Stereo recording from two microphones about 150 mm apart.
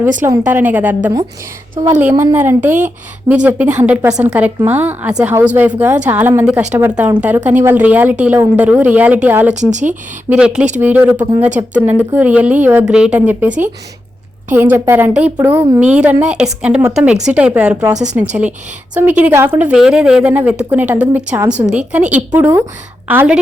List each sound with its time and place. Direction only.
0.3 s a woman's voice: 10° right (ahead or behind)
9.6 s speech: 55° right (ahead or behind)
10.2 s a woman's voice: 5° right (ahead or behind)